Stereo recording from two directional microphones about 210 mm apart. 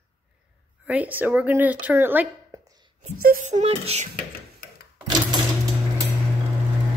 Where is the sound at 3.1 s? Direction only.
35° right (ahead or behind).